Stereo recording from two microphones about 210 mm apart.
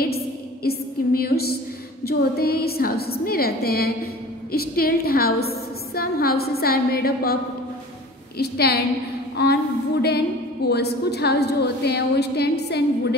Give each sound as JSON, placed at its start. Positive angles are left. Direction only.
{"t": 0.7, "sound": "a sound", "side_deg": 45}
{"t": 2.0, "sound": "a woman's voice", "side_deg": 45}
{"t": 8.4, "sound": "a woman's voice", "side_deg": 50}